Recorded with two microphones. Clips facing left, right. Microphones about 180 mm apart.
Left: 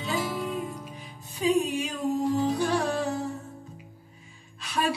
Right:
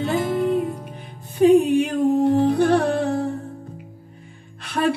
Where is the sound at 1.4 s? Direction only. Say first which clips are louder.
Right 11 dB; 60° right (ahead or behind).